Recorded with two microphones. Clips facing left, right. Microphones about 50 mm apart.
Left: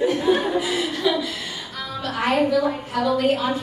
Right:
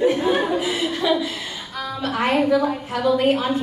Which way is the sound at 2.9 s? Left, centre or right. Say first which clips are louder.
Right 2 dB; right.